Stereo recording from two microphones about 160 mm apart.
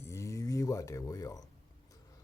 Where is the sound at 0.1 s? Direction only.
20° left (ahead or behind).